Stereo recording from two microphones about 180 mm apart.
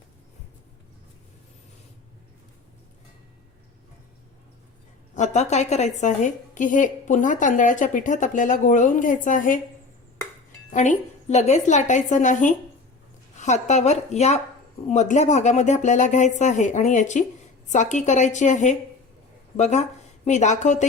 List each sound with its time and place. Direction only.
5.1 s a woman's voice: 40° left (ahead or behind)
10.7 s a woman's voice: 45° left (ahead or behind)